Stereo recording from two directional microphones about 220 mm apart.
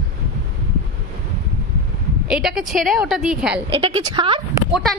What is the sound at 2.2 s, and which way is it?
Speech, centre (ahead or behind).